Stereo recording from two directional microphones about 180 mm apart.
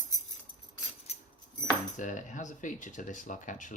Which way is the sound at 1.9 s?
45° left (ahead or behind).